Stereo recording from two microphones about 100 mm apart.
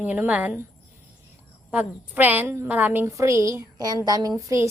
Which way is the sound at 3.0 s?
30° right (ahead or behind).